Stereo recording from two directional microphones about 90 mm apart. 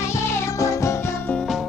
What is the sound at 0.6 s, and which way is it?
Music, 35° left (ahead or behind).